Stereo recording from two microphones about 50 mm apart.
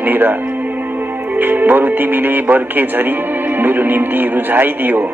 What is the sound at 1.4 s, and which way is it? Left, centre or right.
Speech, right.